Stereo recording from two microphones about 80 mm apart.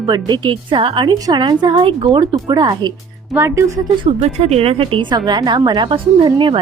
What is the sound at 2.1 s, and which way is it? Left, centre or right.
Speech, right.